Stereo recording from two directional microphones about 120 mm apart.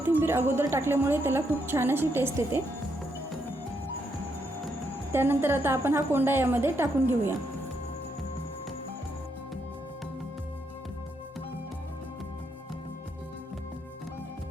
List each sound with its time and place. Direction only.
0.0 s a woman's voice: 15° right (ahead or behind)
5.1 s a woman's voice: 20° right (ahead or behind)